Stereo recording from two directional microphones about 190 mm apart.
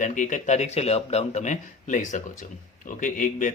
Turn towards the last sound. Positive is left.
turn(degrees=45)  # may be behind; listen again after turning